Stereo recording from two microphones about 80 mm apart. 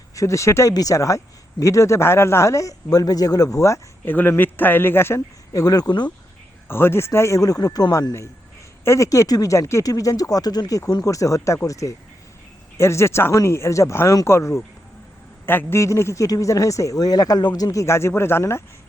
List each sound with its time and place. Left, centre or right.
0.2 s speech: left
4.0 s speech: left
5.5 s speech: left
6.7 s speech: left
8.8 s speech: left
15.8 s speech: left